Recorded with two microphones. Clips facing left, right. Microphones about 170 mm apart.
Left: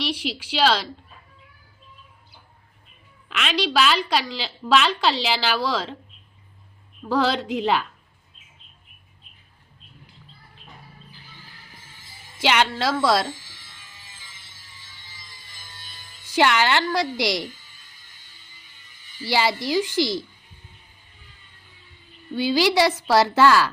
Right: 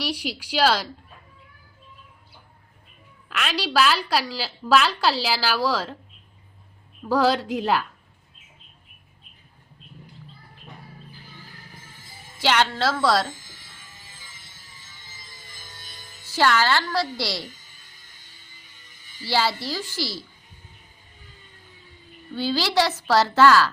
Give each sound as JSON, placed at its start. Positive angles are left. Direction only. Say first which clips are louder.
{"t": 0.0, "sound": "a woman's voice", "louder": "left 1 dB", "side_deg": -10}
{"t": 3.2, "sound": "a woman's voice", "louder": "left 3 dB", "side_deg": -5}
{"t": 7.1, "sound": "a woman's voice", "louder": "right 1 dB", "side_deg": -10}
{"t": 12.4, "sound": "a woman's voice", "louder": "even", "side_deg": 10}
{"t": 13.5, "sound": "a sound", "louder": "right 1 dB", "side_deg": -45}
{"t": 16.3, "sound": "a woman's voice", "louder": "left 1 dB", "side_deg": 15}
{"t": 19.2, "sound": "a woman's voice", "louder": "left 2 dB", "side_deg": 15}
{"t": 22.4, "sound": "a woman's voice", "louder": "left 3 dB", "side_deg": 15}